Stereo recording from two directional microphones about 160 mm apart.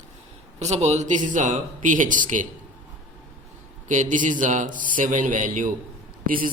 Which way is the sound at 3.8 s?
50° right (ahead or behind).